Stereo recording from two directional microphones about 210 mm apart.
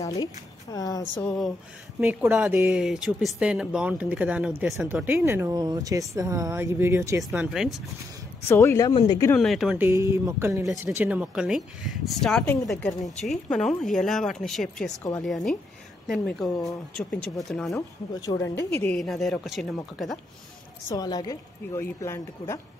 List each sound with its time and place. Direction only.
0.0 s a woman's voice: 15° left (ahead or behind)
2.0 s speech: 10° right (ahead or behind)
7.2 s speech: centre (ahead or behind)
8.5 s a woman's voice: 10° left (ahead or behind)
9.4 s speech: centre (ahead or behind)
18.3 s a woman's voice: 15° left (ahead or behind)
20.9 s a woman's voice: 20° left (ahead or behind)